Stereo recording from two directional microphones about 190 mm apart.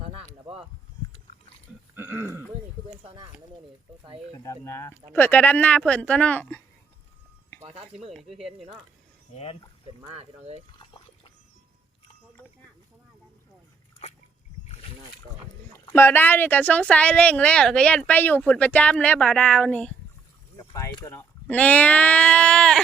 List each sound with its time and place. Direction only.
2.0 s speech: 10° right (ahead or behind)
4.4 s speech: 15° left (ahead or behind)
7.6 s speech: 30° right (ahead or behind)
9.8 s speech: 35° right (ahead or behind)
15.7 s speech: 10° left (ahead or behind)
20.7 s speech: 15° left (ahead or behind)